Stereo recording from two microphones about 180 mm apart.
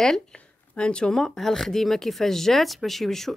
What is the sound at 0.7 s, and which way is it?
Speech, 5° left (ahead or behind).